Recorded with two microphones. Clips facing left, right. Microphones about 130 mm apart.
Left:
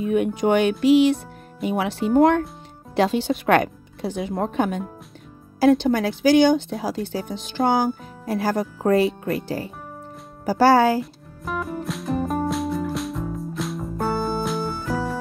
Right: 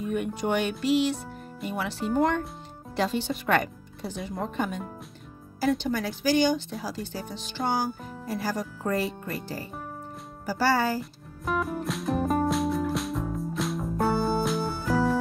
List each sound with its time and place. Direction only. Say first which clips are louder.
0.1 s speech: left 8 dB; 65° left (ahead or behind)
10.4 s speech: left 9 dB; 65° left (ahead or behind)
11.0 s music: left 7 dB; centre (ahead or behind)